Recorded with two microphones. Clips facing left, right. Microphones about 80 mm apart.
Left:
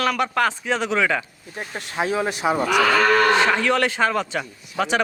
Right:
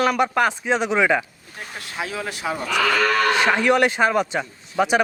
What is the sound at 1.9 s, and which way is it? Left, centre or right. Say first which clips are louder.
Speech: left 6 dB; left.